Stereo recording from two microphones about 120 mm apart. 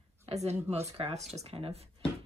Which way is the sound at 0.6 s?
60° right (ahead or behind).